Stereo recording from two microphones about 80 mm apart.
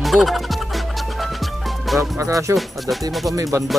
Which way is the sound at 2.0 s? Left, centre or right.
Right.